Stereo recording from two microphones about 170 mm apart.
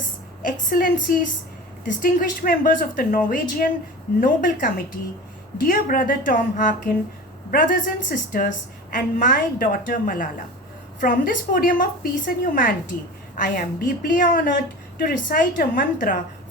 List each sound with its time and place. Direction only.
0.4 s a woman's voice: 55° left (ahead or behind)